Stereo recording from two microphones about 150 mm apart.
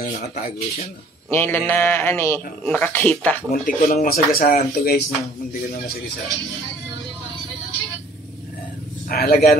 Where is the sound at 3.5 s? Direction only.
65° left (ahead or behind).